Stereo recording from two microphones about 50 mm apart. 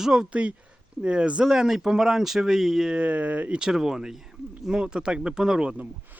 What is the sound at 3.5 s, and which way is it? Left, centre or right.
Speech, centre.